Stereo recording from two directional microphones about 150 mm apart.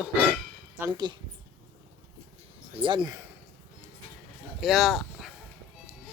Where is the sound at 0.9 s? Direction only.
30° right (ahead or behind).